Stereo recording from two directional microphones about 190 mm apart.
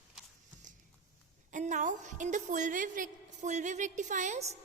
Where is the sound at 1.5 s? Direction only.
40° right (ahead or behind).